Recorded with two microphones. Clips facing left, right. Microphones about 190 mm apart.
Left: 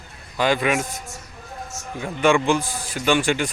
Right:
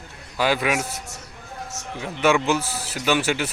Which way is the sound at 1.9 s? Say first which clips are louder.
Left 2 dB; 5° right (ahead or behind).